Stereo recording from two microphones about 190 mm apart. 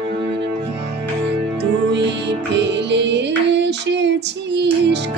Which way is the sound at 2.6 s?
65° right (ahead or behind).